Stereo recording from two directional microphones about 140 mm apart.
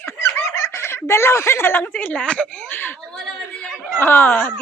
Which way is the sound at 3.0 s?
Centre (ahead or behind).